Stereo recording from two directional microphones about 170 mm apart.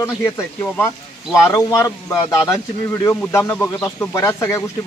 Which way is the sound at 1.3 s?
15° left (ahead or behind).